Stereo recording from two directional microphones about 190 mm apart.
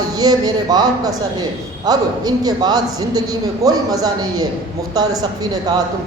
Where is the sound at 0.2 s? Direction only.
20° right (ahead or behind).